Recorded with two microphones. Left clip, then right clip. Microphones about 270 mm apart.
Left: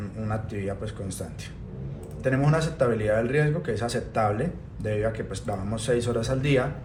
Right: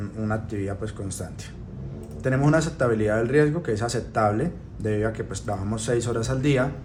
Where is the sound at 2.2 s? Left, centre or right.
Right.